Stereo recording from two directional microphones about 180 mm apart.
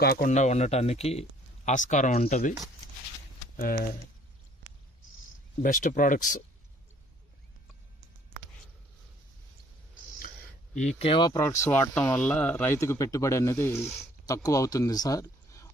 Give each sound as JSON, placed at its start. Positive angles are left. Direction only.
{"t": 0.0, "sound": "speech", "side_deg": 60}
{"t": 0.3, "sound": "speech", "side_deg": 40}
{"t": 3.6, "sound": "speech", "side_deg": 50}
{"t": 5.6, "sound": "speech", "side_deg": 45}
{"t": 10.8, "sound": "speech", "side_deg": 35}